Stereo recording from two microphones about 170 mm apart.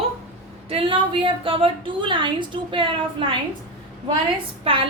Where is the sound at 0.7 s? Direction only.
30° right (ahead or behind).